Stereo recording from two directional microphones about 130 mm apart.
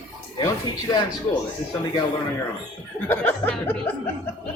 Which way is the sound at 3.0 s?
15° left (ahead or behind).